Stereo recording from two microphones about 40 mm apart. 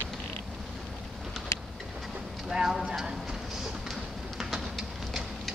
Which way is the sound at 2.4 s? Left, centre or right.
Centre.